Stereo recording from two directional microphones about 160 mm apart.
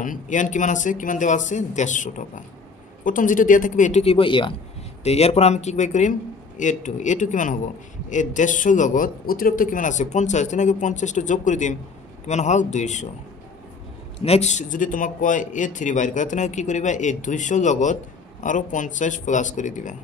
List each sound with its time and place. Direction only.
0.0 s a man's voice: 55° left (ahead or behind)
14.2 s a man's voice: 40° left (ahead or behind)